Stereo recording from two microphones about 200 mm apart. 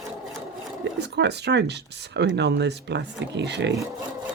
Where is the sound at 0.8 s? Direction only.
60° right (ahead or behind).